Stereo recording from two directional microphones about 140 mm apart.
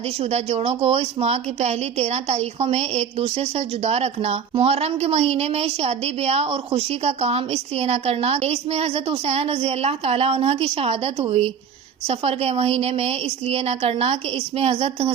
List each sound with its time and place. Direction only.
0.2 s a woman's voice: 50° right (ahead or behind)